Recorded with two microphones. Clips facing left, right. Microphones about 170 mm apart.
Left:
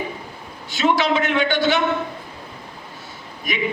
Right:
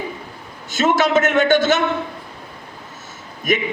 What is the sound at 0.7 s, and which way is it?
A man's voice, 45° right (ahead or behind).